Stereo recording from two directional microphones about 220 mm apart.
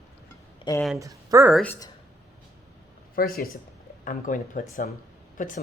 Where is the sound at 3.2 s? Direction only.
40° left (ahead or behind).